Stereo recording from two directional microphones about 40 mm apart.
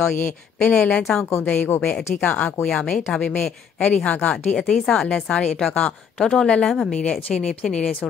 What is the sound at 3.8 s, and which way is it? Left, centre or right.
Speech, left.